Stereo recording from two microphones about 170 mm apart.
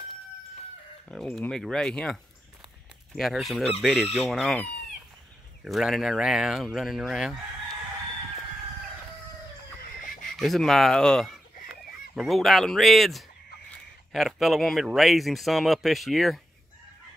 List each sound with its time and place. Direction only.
1.0 s speech: 5° left (ahead or behind)
3.2 s speech: centre (ahead or behind)
9.8 s a sound: 55° left (ahead or behind)
10.3 s speech: centre (ahead or behind)